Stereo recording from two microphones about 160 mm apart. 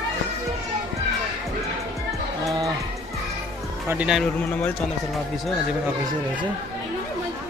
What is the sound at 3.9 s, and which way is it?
Speech, 5° right (ahead or behind).